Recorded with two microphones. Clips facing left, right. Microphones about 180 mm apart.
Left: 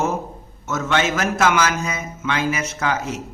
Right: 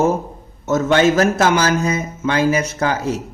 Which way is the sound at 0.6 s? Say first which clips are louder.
Right 7 dB; 35° right (ahead or behind).